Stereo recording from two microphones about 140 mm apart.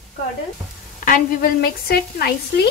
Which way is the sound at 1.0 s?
85° left.